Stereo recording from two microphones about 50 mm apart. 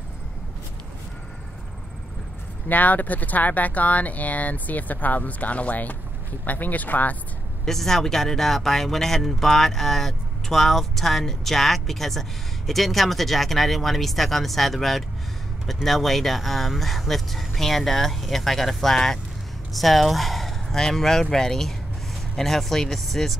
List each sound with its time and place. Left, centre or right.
2.7 s speech: left
7.6 s speech: centre